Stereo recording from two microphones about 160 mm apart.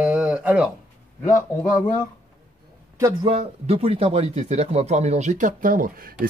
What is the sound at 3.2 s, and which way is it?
Speech, 40° right (ahead or behind).